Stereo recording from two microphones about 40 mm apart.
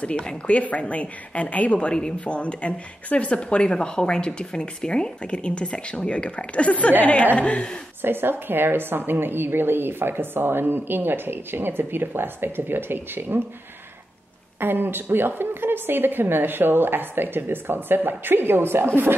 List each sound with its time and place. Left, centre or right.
0.0 s a woman's voice: left
8.0 s a woman's voice: right
14.6 s a woman's voice: right